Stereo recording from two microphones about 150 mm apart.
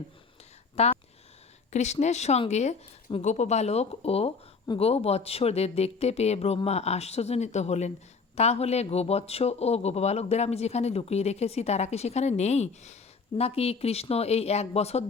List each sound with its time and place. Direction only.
0.8 s speech: 45° left (ahead or behind)